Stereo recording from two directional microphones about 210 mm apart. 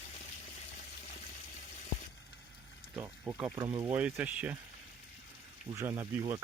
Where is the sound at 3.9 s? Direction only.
5° right (ahead or behind).